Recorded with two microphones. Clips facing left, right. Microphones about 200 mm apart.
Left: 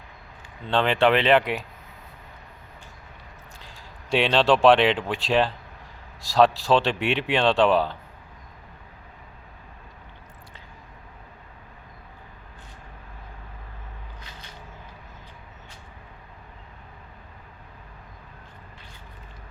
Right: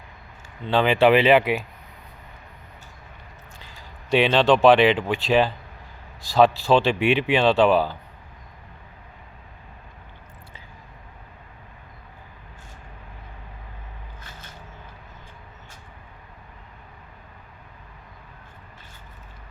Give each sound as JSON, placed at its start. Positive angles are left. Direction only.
{"t": 0.7, "sound": "speech", "side_deg": -5}
{"t": 3.6, "sound": "speech", "side_deg": 0}
{"t": 14.2, "sound": "a sound", "side_deg": -50}